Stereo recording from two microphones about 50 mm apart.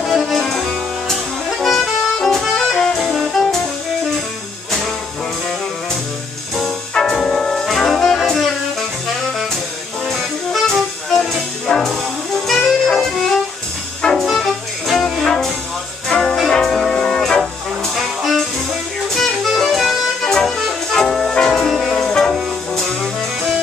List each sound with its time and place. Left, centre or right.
0.0 s music: centre
2.5 s saxophone: centre
4.6 s music: centre
7.0 s jazz: centre
10.0 s music: centre
18.2 s music: centre
21.4 s music: centre
21.6 s music: centre
21.9 s music: centre